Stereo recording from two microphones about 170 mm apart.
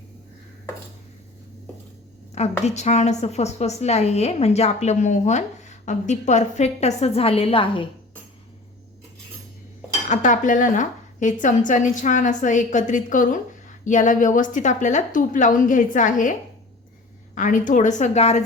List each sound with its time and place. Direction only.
2.3 s a woman's voice: 40° left (ahead or behind)
10.1 s a woman's voice: 50° left (ahead or behind)
17.3 s a woman's voice: 50° left (ahead or behind)